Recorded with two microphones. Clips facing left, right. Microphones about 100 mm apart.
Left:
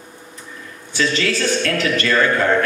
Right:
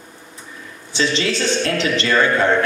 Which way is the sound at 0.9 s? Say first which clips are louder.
Even; 25° right (ahead or behind).